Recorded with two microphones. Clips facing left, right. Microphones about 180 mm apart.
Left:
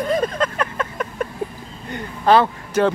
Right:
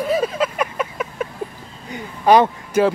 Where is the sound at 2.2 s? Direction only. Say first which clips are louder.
Right 2 dB; 15° right (ahead or behind).